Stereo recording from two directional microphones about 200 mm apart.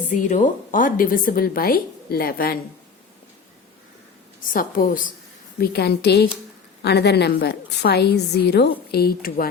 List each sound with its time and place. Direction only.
0.1 s a woman's voice: 40° left (ahead or behind)
4.4 s a woman's voice: 40° left (ahead or behind)